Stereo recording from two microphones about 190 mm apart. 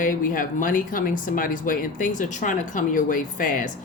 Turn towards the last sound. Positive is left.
turn(degrees=45)  # may be behind; listen again after turning